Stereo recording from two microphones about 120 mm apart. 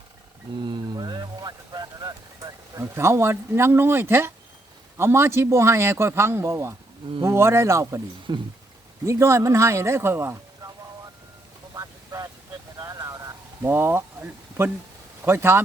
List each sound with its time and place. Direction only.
0.6 s a sound: 35° right (ahead or behind); by 4.3 s 20° right (ahead or behind)
4.9 s a man's voice: 20° right (ahead or behind)
8.3 s speech: 40° right (ahead or behind)
9.0 s a man's voice: 25° right (ahead or behind)
11.7 s a sound: 30° right (ahead or behind)
13.6 s speech: 20° right (ahead or behind)